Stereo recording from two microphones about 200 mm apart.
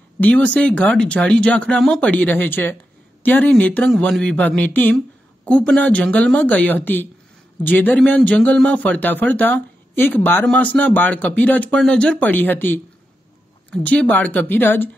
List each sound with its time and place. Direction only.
0.2 s speech: 5° left (ahead or behind)